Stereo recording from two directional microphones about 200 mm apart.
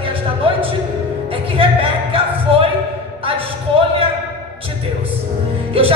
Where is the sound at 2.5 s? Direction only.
25° right (ahead or behind).